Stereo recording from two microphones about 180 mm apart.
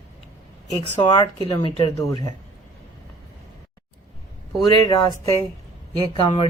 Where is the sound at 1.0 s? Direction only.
25° left (ahead or behind).